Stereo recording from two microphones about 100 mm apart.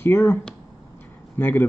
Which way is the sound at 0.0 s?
25° left (ahead or behind).